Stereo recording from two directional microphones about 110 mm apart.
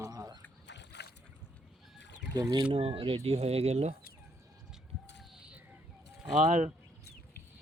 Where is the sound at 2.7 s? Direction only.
60° right (ahead or behind); by 3.9 s 80° right.